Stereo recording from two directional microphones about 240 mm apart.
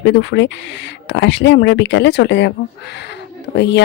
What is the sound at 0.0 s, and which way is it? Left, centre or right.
Speech, left.